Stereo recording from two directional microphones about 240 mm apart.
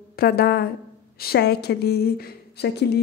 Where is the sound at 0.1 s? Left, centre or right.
Left.